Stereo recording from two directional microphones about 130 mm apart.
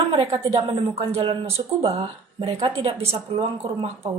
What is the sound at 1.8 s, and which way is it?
Speech, 35° right (ahead or behind).